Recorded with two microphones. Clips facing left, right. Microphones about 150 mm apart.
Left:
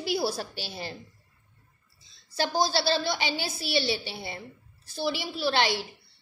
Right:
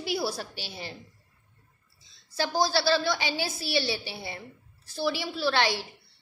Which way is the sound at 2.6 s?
25° left (ahead or behind).